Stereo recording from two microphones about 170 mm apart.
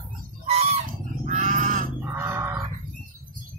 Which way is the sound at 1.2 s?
45° right (ahead or behind).